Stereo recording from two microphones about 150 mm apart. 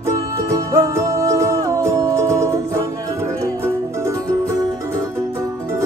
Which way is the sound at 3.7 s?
20° right (ahead or behind).